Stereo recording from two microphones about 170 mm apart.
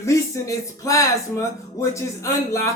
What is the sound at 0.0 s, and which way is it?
Speech, 20° left (ahead or behind).